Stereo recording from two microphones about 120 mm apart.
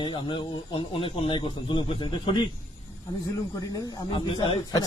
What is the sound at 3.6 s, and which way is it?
Speech, 30° left (ahead or behind).